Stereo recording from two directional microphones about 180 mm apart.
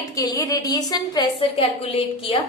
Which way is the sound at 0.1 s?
20° left (ahead or behind).